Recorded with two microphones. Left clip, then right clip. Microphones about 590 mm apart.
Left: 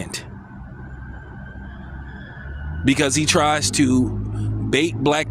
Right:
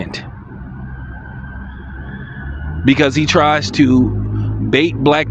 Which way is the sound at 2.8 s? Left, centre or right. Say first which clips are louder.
Right 5 dB; left.